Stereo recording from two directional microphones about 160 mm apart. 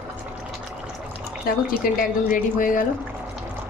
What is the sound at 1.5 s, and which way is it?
Speech, 70° left (ahead or behind).